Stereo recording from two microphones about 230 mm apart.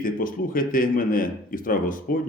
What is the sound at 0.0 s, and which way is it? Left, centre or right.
Speech, left.